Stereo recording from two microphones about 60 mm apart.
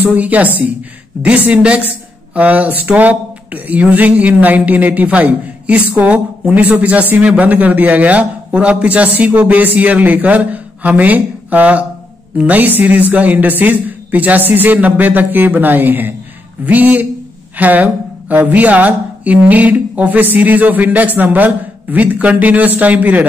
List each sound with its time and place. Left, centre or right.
0.1 s speech: right